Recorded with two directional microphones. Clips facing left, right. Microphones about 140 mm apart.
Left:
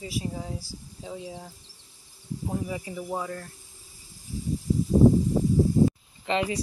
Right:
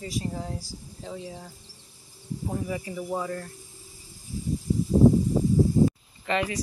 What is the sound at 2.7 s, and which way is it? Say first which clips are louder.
Speech: right 2 dB; 10° left (ahead or behind).